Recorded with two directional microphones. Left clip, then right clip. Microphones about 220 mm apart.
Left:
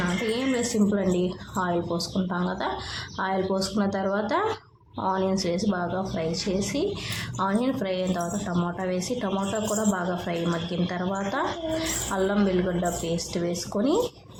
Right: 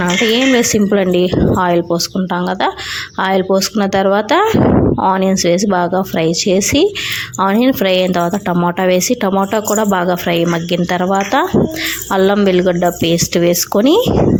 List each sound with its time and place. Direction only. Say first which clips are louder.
0.1 s a woman's voice: right 15 dB; 40° right (ahead or behind)